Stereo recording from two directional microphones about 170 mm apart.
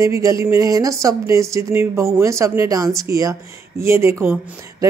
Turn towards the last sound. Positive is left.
turn(degrees=-15)  # may be behind; listen again after turning